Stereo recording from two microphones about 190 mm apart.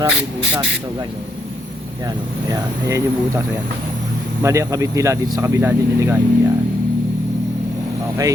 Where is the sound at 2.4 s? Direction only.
20° right (ahead or behind).